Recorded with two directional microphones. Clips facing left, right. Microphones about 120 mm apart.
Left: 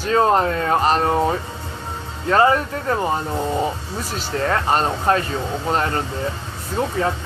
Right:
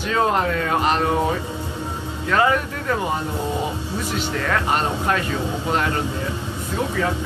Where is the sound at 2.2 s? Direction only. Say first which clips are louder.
Left 3 dB; 35° left (ahead or behind).